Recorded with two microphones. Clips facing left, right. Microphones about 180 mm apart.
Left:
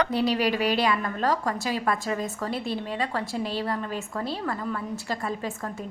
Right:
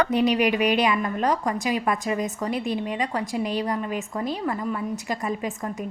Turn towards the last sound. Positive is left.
turn(degrees=-15)  # may be behind; listen again after turning